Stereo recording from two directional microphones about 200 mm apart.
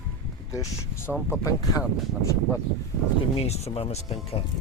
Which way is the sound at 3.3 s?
30° left (ahead or behind).